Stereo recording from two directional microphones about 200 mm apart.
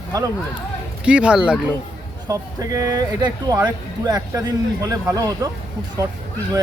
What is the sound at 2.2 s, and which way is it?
Speech, 15° right (ahead or behind).